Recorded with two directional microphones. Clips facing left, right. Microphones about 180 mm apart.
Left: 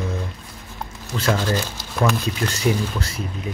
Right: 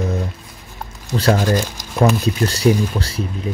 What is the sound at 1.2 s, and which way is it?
Speech, 35° right (ahead or behind).